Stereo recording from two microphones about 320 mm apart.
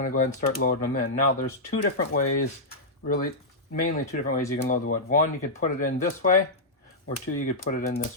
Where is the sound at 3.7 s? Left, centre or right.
Left.